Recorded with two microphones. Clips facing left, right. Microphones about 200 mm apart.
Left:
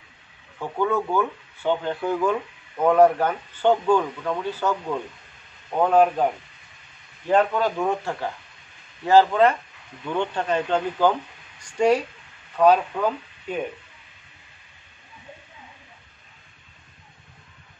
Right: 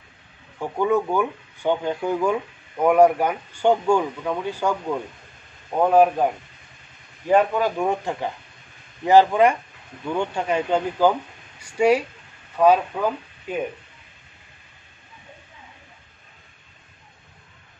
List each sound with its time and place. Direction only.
0.6 s speech: 15° right (ahead or behind)
7.2 s speech: 10° right (ahead or behind)
11.6 s a sound: 10° right (ahead or behind)
12.5 s speech: 10° right (ahead or behind)